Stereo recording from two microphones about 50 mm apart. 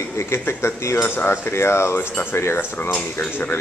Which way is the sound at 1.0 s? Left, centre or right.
Left.